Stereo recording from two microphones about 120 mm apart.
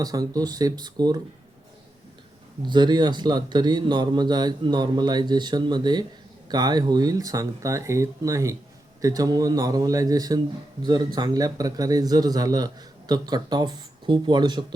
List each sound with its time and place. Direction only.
0.0 s speech: 30° right (ahead or behind)
2.6 s speech: 40° right (ahead or behind)